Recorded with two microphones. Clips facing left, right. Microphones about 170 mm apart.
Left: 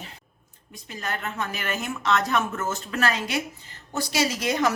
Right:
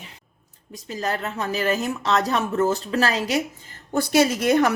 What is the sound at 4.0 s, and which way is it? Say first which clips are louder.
Speech: right 7 dB; 55° right (ahead or behind).